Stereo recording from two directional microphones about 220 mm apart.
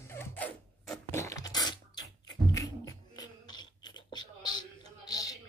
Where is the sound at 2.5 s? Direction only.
15° left (ahead or behind).